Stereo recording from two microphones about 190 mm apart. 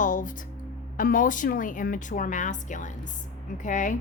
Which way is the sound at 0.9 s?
45° left (ahead or behind).